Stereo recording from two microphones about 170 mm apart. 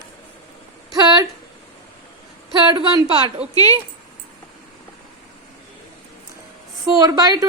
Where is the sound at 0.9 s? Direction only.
25° right (ahead or behind).